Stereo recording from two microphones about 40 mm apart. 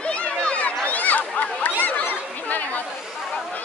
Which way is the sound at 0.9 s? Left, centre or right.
Left.